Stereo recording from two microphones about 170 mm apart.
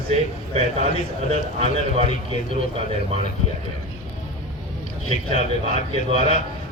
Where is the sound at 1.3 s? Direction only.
35° right (ahead or behind).